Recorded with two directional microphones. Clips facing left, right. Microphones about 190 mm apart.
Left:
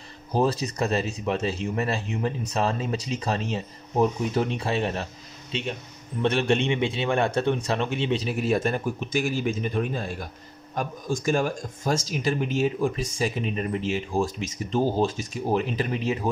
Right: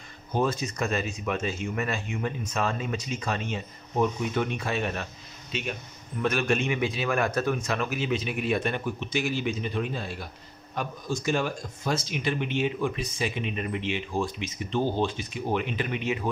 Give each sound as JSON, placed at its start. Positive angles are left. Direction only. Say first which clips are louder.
{"t": 0.3, "sound": "speech", "louder": "left 3 dB", "side_deg": 35}